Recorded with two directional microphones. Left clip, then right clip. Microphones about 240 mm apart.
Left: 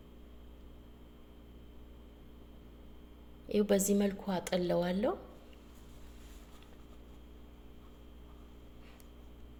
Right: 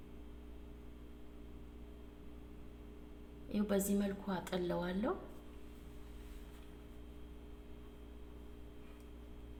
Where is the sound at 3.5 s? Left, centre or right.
Left.